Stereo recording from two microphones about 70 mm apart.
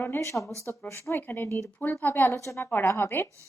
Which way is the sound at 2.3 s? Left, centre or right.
Left.